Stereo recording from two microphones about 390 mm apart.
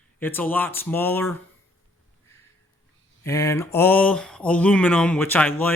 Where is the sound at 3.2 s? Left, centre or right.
Centre.